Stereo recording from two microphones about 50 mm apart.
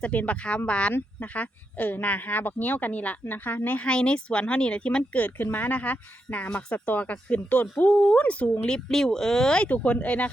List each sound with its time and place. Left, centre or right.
0.0 s a woman's voice: left
3.2 s speech: left
3.8 s a woman's voice: centre
5.2 s speech: left
6.7 s a woman's voice: left
8.9 s speech: centre
9.6 s a woman's voice: left